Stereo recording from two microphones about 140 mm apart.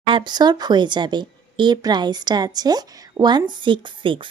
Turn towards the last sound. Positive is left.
turn(degrees=-35)  # may be behind; listen again after turning